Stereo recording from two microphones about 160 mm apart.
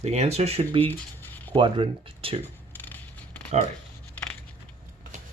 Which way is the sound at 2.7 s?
10° left (ahead or behind).